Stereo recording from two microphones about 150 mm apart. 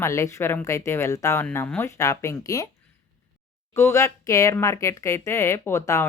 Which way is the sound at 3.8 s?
20° left (ahead or behind).